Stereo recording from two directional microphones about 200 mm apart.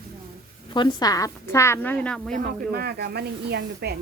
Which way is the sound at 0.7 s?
20° left (ahead or behind).